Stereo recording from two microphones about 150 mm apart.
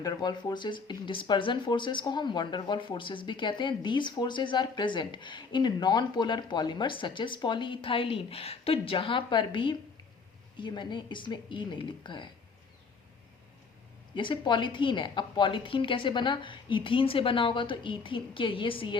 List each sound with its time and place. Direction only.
0.0 s speech: 25° left (ahead or behind)
14.2 s speech: 30° left (ahead or behind)